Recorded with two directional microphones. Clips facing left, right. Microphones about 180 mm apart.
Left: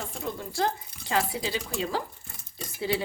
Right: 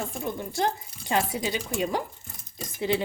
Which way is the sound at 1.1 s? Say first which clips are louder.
Right 2 dB; 20° right (ahead or behind).